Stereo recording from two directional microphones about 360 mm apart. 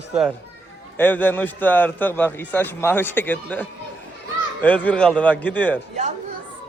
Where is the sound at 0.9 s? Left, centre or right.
Centre.